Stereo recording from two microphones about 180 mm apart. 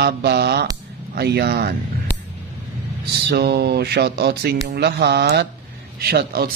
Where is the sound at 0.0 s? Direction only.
65° right (ahead or behind).